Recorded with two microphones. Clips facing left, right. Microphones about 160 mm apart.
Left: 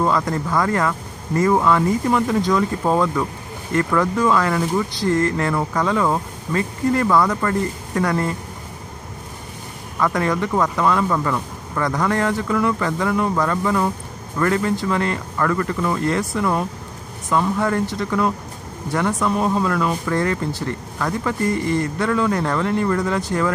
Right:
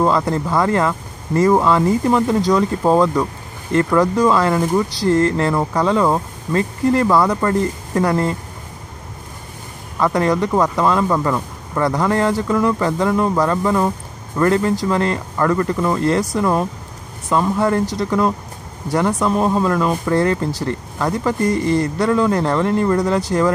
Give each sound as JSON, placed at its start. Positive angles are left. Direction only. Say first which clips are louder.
{"t": 0.0, "sound": "speech", "louder": "right 3 dB", "side_deg": -30}
{"t": 9.9, "sound": "speech", "louder": "right 4 dB", "side_deg": -30}